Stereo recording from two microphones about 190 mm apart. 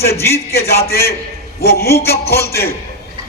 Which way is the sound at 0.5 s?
55° left (ahead or behind).